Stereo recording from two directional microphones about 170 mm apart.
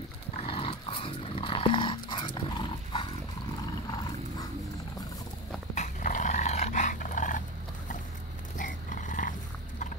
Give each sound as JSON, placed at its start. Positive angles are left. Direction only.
{"t": 0.4, "sound": "dog", "side_deg": 35}
{"t": 5.8, "sound": "dog", "side_deg": 45}
{"t": 8.5, "sound": "a sound", "side_deg": 50}